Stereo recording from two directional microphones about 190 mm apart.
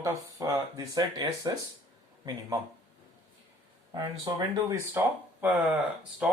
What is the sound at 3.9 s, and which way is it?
Speech, 20° right (ahead or behind).